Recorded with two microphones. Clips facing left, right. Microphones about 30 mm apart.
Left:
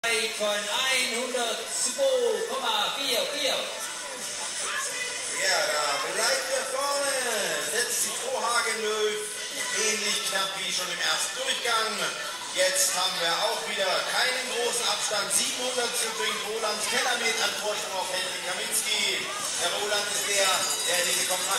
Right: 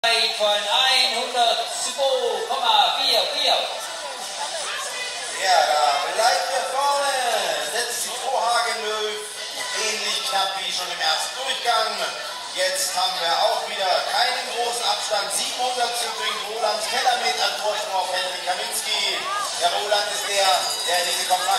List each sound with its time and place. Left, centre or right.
0.0 s speech: right
5.4 s a sound: right
9.8 s music: right
11.6 s a man's voice: right